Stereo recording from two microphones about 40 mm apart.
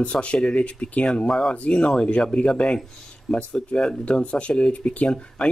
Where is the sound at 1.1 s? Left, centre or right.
Centre.